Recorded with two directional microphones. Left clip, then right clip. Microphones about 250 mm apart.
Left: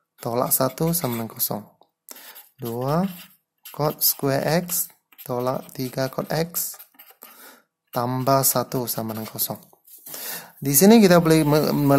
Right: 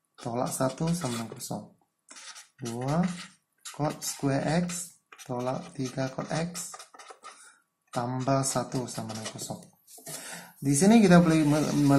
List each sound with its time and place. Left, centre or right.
0.2 s speech: left
2.6 s speech: left
7.9 s speech: left